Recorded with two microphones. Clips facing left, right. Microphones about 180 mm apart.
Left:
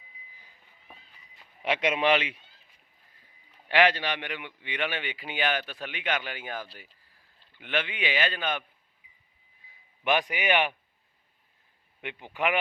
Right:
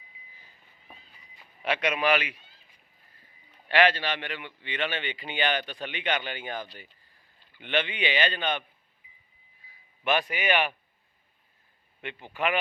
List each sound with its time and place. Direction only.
1.6 s speech: 25° left (ahead or behind)
3.7 s a man's voice: 15° left (ahead or behind)
10.0 s a man's voice: 15° left (ahead or behind)
12.0 s a man's voice: 15° left (ahead or behind)